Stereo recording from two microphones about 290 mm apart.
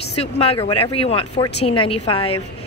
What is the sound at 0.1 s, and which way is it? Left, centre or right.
Speech, left.